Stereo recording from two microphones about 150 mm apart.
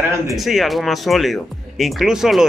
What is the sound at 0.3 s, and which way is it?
Speech, centre (ahead or behind).